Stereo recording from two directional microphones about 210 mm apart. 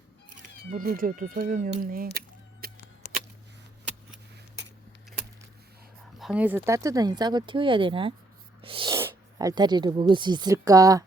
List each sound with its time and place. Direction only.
0.3 s speech: 35° right (ahead or behind)
6.1 s speech: 5° right (ahead or behind)